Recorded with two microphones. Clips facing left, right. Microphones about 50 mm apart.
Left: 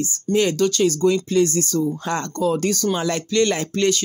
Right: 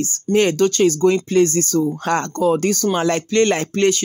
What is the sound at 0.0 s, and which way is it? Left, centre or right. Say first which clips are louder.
Speech: right 3 dB; right.